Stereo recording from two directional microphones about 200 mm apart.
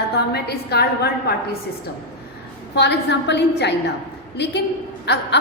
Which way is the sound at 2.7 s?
60° left (ahead or behind).